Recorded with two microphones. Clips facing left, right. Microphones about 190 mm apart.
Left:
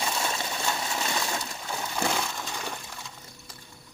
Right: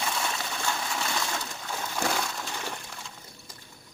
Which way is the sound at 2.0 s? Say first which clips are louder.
Even; centre (ahead or behind).